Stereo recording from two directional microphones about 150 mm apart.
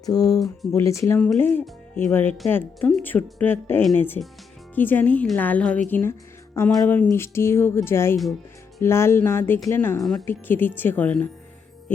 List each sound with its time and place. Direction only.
0.0 s speech: 25° left (ahead or behind)
10.0 s speech: centre (ahead or behind)
10.2 s speech: 15° left (ahead or behind)